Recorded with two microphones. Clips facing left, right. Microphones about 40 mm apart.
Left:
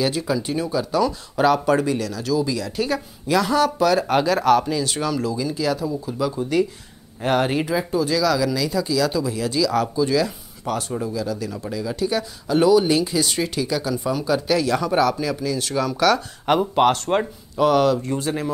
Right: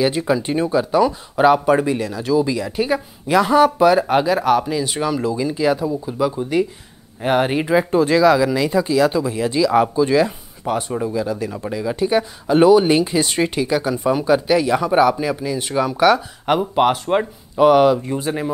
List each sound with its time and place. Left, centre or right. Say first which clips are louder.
0.0 s speech: right 4 dB; right
7.7 s speech: right 6 dB; right; by 16.2 s centre
16.4 s speech: right 1 dB; centre